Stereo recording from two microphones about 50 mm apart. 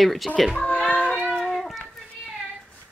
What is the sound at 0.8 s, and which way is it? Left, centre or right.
Child singing, left.